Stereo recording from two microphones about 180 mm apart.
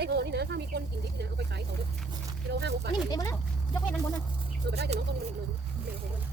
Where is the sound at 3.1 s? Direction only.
15° left (ahead or behind).